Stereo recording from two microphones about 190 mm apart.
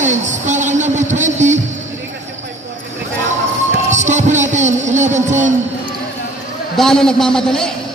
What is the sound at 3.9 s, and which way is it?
Music, 40° right (ahead or behind).